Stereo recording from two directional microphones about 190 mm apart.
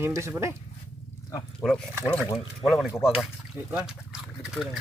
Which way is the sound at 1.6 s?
5° left (ahead or behind).